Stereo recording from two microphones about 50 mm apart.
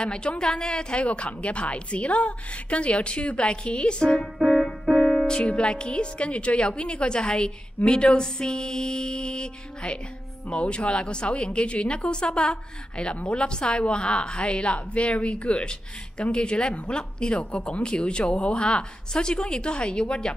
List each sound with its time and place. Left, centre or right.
0.0 s a woman's voice: centre
4.5 s music: centre
4.9 s a woman's voice: centre